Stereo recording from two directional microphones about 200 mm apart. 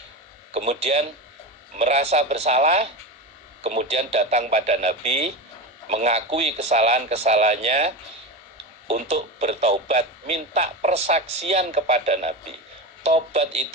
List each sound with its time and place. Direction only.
0.5 s speech: 30° right (ahead or behind)